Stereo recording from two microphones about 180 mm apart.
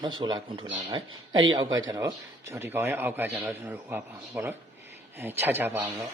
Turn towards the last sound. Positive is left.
turn(degrees=-15)  # may be behind; listen again after turning